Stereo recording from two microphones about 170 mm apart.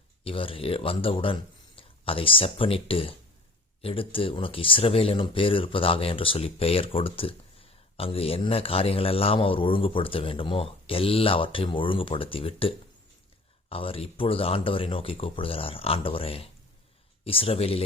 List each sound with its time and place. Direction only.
0.3 s speech: 30° left (ahead or behind)